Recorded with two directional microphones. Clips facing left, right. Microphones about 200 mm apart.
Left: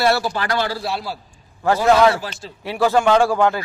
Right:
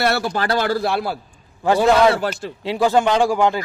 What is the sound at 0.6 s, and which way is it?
Speech, 55° right (ahead or behind).